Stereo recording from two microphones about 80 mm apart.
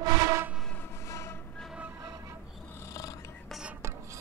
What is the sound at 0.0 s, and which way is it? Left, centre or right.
Train, right.